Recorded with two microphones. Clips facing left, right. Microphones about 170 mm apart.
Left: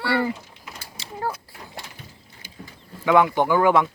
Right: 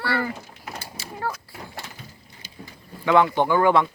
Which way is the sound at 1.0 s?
25° left (ahead or behind).